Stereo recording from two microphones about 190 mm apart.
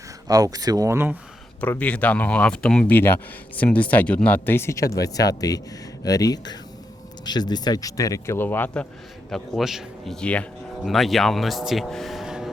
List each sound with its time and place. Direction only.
0.3 s speech: 20° right (ahead or behind)
1.6 s speech: 10° left (ahead or behind)